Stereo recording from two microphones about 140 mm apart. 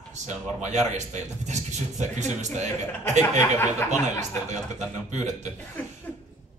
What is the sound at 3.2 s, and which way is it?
Speech, 20° left (ahead or behind).